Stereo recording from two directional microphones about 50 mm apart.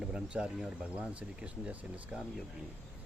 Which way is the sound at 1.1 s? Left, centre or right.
Right.